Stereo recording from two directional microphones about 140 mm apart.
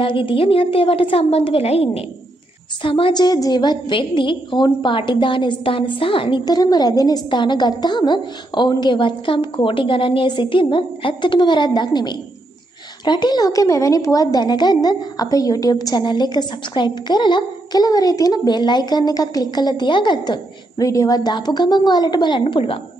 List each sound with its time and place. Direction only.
0.0 s a woman's voice: 35° left (ahead or behind)